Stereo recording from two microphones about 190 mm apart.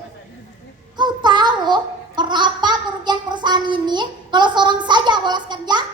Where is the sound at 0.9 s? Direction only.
25° right (ahead or behind).